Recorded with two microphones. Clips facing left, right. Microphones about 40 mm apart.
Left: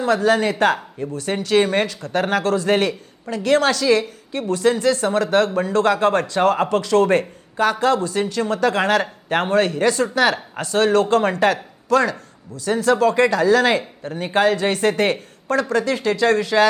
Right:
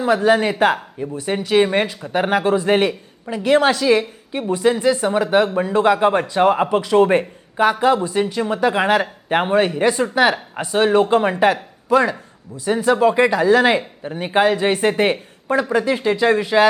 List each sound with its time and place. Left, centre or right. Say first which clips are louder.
0.0 s speech: right 2 dB; centre